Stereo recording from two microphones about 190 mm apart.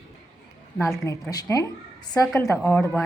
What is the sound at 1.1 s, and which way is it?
A woman's voice, 20° left (ahead or behind).